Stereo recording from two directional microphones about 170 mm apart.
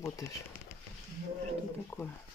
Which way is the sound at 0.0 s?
20° left (ahead or behind).